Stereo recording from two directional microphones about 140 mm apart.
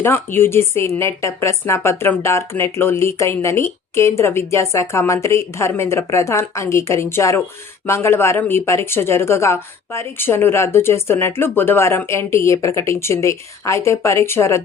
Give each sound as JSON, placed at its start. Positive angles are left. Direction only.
{"t": 0.0, "sound": "a woman's voice", "side_deg": 15}